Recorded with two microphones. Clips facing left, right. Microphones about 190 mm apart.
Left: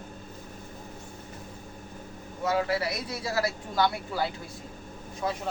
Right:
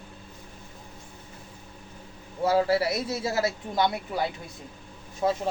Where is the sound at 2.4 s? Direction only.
30° right (ahead or behind).